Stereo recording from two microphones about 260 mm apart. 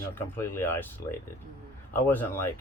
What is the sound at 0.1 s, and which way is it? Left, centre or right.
Speech, centre.